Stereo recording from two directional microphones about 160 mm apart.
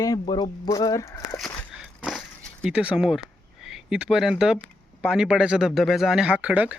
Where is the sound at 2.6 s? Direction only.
5° right (ahead or behind).